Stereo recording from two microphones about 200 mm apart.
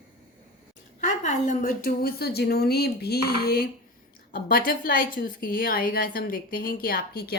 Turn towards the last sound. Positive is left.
turn(degrees=50)  # may be behind; listen again after turning